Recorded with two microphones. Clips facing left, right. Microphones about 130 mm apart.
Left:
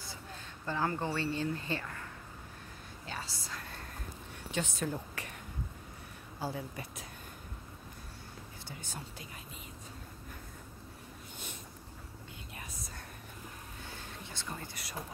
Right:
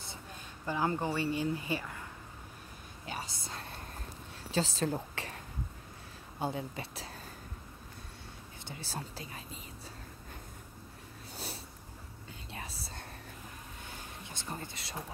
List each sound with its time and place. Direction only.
0.7 s speech: 15° right (ahead or behind)
3.1 s whispering: 20° right (ahead or behind)
4.5 s a woman's voice: 30° right (ahead or behind)
6.4 s a woman's voice: 25° right (ahead or behind)
8.6 s speech: 35° right (ahead or behind)
11.3 s a sound: 35° right (ahead or behind)
12.5 s whispering: 30° right (ahead or behind)
14.5 s a woman's voice: 25° right (ahead or behind)